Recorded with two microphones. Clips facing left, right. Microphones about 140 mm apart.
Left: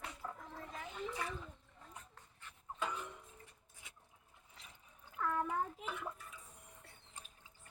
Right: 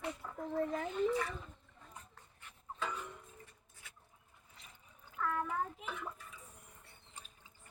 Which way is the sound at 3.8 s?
20° left (ahead or behind).